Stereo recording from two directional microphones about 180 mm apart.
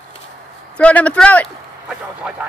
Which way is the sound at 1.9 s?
5° right (ahead or behind).